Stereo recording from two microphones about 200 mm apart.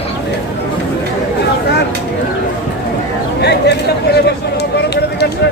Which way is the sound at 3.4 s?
55° left (ahead or behind).